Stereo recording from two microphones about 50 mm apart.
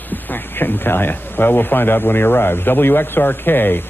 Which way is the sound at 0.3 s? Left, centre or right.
Left.